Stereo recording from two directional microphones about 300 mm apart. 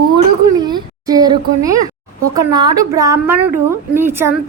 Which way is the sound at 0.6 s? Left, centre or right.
Centre.